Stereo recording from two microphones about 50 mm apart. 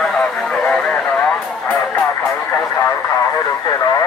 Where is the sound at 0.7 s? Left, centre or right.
Left.